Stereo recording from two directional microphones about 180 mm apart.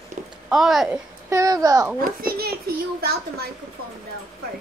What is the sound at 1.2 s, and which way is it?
Speech, 15° right (ahead or behind).